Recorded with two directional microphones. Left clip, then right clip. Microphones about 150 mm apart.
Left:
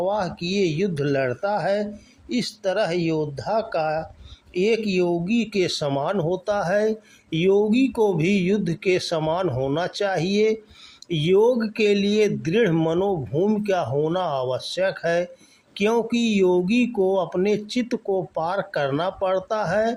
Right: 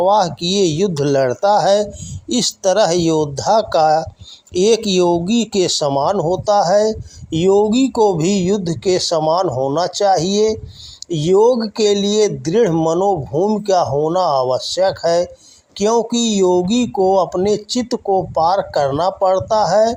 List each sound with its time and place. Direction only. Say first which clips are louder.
0.0 s speech: right 10 dB; 35° right (ahead or behind); by 13.6 s 15° right (ahead or behind)
13.6 s speech: right 7 dB; 25° right (ahead or behind)